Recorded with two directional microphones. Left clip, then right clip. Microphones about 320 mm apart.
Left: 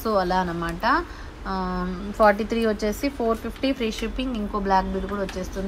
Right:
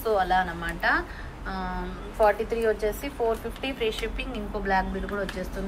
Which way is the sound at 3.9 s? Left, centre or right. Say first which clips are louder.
Left 1 dB; centre.